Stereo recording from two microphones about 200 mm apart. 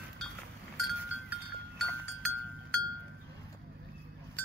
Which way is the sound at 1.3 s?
Centre (ahead or behind).